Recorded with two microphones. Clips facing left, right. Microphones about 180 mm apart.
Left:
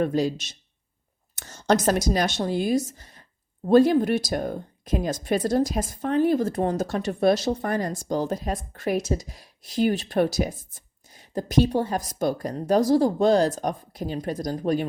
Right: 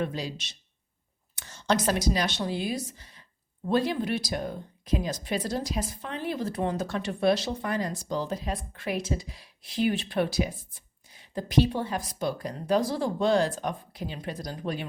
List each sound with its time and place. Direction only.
0.0 s speech: 45° left (ahead or behind)